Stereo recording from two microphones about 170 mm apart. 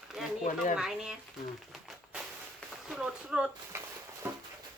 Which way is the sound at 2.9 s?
5° right (ahead or behind).